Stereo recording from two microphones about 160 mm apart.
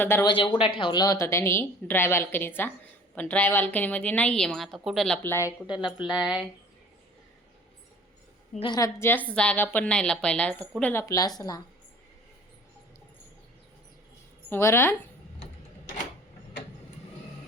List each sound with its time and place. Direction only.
0.0 s a woman's voice: 15° left (ahead or behind)
0.3 s a woman's voice: 30° left (ahead or behind); by 5.5 s 15° left (ahead or behind)
6.1 s speech: 5° right (ahead or behind)
8.7 s a woman's voice: 20° left (ahead or behind)
11.0 s a woman's voice: 20° left (ahead or behind)
14.5 s a woman's voice: 15° left (ahead or behind)